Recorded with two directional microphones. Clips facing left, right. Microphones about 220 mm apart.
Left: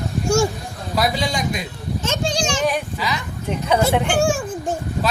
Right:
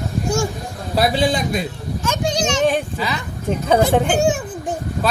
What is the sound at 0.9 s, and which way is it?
Speech, 30° right (ahead or behind).